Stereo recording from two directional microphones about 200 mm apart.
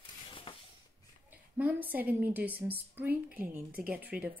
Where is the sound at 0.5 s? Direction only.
25° left (ahead or behind).